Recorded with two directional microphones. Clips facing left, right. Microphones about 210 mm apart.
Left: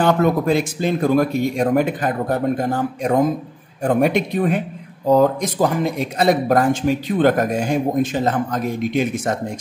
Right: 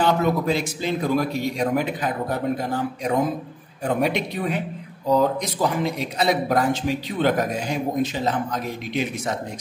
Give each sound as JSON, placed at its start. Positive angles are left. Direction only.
{"t": 0.0, "sound": "speech", "side_deg": 50}